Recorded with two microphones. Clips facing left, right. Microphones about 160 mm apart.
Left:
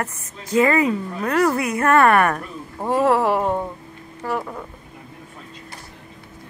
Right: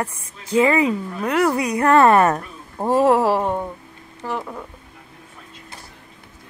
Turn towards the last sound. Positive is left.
turn(degrees=5)  # may be behind; listen again after turning